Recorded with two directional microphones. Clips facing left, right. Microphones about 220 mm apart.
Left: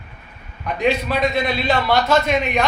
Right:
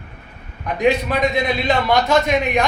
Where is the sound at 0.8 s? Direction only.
15° right (ahead or behind).